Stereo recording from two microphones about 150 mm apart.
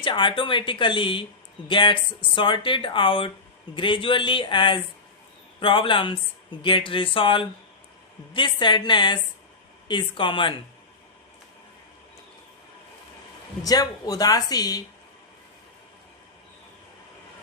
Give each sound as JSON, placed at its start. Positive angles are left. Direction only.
{"t": 0.0, "sound": "speech", "side_deg": 35}
{"t": 13.7, "sound": "speech", "side_deg": 25}